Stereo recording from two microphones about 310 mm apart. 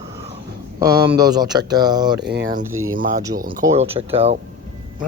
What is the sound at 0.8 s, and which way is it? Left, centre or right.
A man's voice, centre.